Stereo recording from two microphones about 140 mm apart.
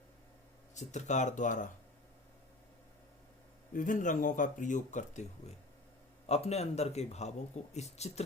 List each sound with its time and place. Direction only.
0.7 s speech: 60° left (ahead or behind)
3.7 s speech: 70° left (ahead or behind)
6.2 s speech: 50° left (ahead or behind)